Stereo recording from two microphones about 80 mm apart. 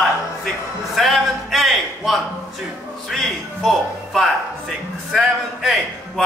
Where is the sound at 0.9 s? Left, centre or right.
Centre.